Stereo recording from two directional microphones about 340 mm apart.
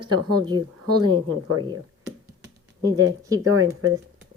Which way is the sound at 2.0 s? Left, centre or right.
Centre.